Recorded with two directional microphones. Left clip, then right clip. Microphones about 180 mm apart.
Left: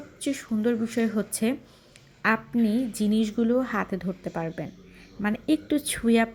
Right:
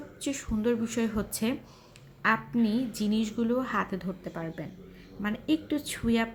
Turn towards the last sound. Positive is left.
turn(degrees=25)  # may be behind; listen again after turning